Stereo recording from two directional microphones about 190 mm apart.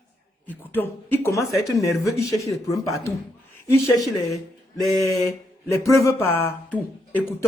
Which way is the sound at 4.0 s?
Centre (ahead or behind).